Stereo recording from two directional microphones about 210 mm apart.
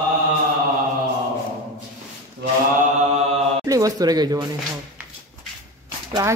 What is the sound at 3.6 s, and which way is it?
Speech, 15° right (ahead or behind).